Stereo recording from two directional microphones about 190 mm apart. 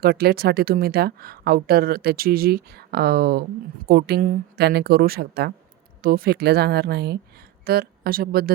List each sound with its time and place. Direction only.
0.0 s a woman's voice: 55° right (ahead or behind)